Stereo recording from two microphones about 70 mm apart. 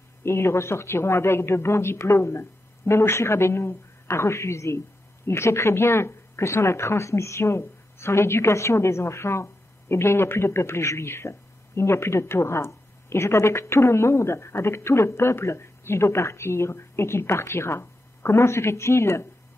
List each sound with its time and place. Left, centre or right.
0.2 s a man's voice: left